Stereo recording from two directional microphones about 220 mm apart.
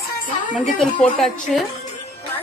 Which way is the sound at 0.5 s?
Centre (ahead or behind).